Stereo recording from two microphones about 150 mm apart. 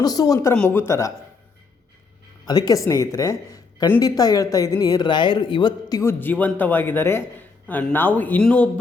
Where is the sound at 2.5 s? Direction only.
25° left (ahead or behind).